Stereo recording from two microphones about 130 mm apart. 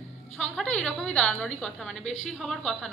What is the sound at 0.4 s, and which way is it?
A woman's voice, 5° left (ahead or behind).